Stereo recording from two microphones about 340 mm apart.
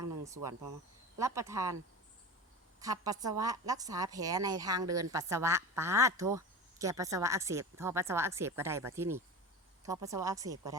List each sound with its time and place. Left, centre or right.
0.4 s speech: right
1.2 s speech: centre
2.8 s speech: centre